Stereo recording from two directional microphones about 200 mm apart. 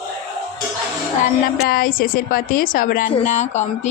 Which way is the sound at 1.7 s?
45° left (ahead or behind).